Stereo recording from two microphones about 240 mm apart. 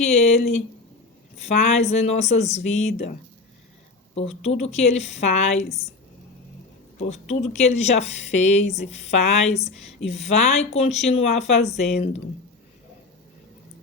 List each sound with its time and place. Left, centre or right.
0.0 s speech: left
7.1 s speech: left